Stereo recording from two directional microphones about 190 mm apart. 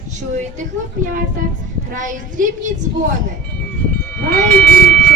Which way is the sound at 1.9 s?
45° right (ahead or behind).